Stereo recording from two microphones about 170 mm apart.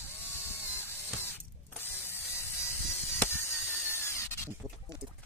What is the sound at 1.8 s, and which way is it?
Mechanisms, 15° left (ahead or behind).